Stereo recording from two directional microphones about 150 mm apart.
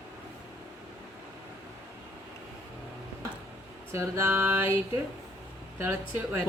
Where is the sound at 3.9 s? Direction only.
15° right (ahead or behind).